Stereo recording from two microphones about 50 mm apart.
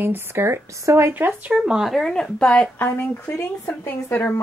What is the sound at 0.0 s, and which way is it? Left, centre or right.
Speech, right.